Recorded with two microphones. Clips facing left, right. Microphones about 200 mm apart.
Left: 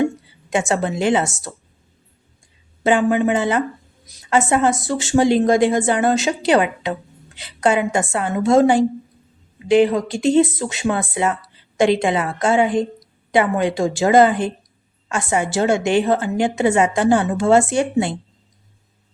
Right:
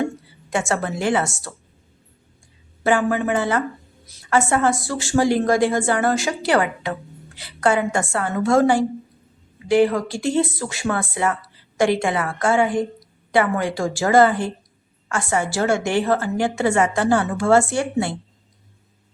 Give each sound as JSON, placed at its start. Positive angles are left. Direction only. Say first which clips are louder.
{"t": 0.5, "sound": "a woman's voice", "louder": "left 3 dB", "side_deg": 20}
{"t": 2.8, "sound": "a woman's voice", "louder": "left 3 dB", "side_deg": 20}